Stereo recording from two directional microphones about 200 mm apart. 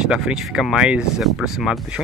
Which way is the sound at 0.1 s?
5° right (ahead or behind).